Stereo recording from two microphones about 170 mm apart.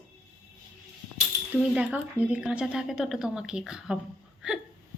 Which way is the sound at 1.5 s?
5° right (ahead or behind).